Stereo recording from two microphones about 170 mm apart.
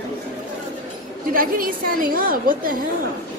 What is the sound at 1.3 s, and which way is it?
A woman's voice, 55° right (ahead or behind).